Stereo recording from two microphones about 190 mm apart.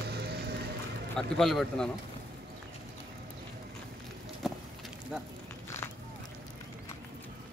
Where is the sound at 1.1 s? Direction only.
5° left (ahead or behind).